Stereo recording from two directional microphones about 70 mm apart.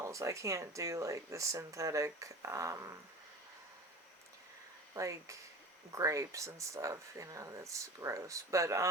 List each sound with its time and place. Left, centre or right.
0.0 s speech: right
4.9 s speech: right